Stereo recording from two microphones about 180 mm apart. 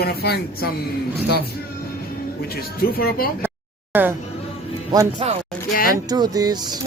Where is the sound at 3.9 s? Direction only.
10° right (ahead or behind).